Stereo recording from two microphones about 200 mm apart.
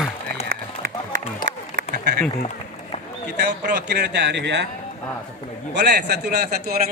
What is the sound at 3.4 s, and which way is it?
A man's voice, 50° right (ahead or behind).